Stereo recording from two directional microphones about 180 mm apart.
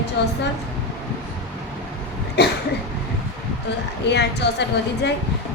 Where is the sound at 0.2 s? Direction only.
75° left (ahead or behind).